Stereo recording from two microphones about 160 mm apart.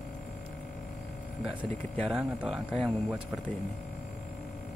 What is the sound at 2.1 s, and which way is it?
Speech, 5° right (ahead or behind).